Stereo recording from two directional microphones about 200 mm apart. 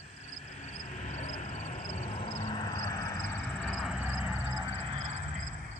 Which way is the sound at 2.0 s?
25° left (ahead or behind).